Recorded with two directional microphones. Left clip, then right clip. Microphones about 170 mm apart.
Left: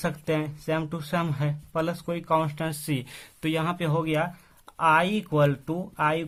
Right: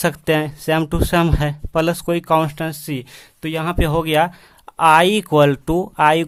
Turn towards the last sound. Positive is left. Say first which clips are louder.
# right 11 dB
turn(degrees=-45)  # may be behind; listen again after turning